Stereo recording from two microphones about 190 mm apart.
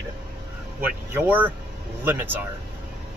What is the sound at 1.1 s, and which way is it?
Speech, 10° right (ahead or behind).